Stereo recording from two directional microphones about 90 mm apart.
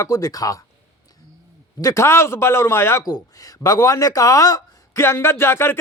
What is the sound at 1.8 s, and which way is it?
A man's voice, 35° left (ahead or behind).